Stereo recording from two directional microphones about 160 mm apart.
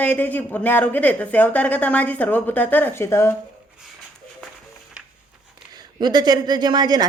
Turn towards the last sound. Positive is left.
turn(degrees=-25)  # may be behind; listen again after turning